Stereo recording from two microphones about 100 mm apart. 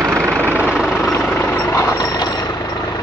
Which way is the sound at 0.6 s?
5° right (ahead or behind).